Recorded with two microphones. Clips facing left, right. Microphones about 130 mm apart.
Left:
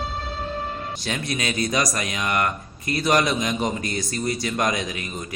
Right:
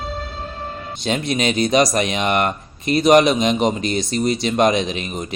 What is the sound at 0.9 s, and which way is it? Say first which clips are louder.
A man's voice: right 10 dB; 20° right (ahead or behind).